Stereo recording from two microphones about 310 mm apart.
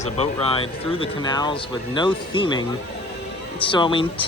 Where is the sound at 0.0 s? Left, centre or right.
Centre.